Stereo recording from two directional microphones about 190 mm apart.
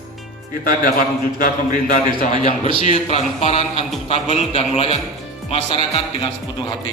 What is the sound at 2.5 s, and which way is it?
Speech, 25° right (ahead or behind).